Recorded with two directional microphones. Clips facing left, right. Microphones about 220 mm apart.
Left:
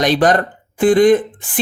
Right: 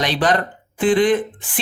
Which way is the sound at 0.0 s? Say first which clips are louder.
Left 5 dB; 45° left (ahead or behind).